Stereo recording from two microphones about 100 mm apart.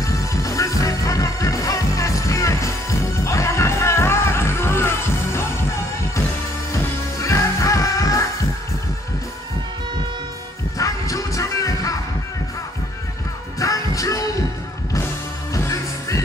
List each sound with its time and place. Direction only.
0.0 s music: 35° left (ahead or behind)
7.2 s music: 30° left (ahead or behind)
10.8 s music: 35° left (ahead or behind)
13.6 s music: 35° left (ahead or behind)
15.5 s music: 35° left (ahead or behind)